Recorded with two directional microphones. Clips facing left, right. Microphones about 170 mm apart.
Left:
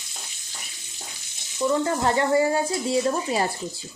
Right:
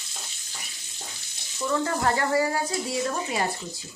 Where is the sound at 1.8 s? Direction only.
25° left (ahead or behind).